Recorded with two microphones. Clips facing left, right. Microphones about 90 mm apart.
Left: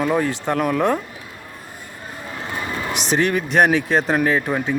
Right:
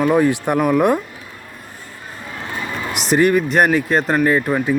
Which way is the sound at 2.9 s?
5° right (ahead or behind).